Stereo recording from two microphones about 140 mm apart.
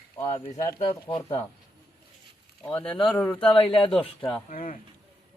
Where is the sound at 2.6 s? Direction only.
10° left (ahead or behind).